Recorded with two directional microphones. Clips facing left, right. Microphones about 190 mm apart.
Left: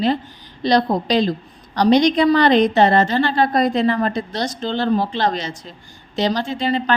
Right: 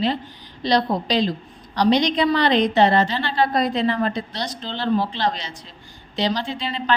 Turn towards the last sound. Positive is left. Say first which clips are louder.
# left 7 dB
turn(degrees=45)  # may be behind; listen again after turning